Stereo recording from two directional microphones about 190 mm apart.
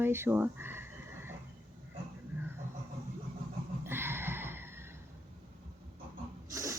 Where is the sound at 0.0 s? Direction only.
10° right (ahead or behind).